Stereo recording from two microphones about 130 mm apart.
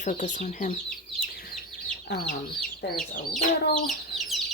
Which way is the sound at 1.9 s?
5° left (ahead or behind).